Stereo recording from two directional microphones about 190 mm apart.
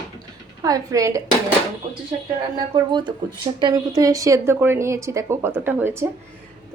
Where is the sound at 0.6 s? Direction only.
20° right (ahead or behind).